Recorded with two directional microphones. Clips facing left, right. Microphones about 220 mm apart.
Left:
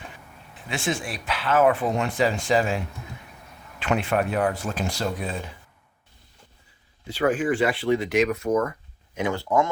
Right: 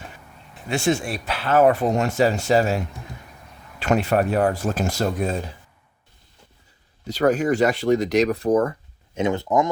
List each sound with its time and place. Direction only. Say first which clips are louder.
0.7 s speech: right 6 dB; 40° right (ahead or behind)
7.1 s speech: right 3 dB; 40° right (ahead or behind); by 9.6 s 20° right (ahead or behind)